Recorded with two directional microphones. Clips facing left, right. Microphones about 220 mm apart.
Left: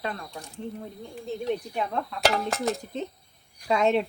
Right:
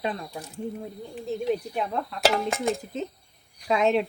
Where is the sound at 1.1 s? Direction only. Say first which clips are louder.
Right 2 dB; 5° right (ahead or behind).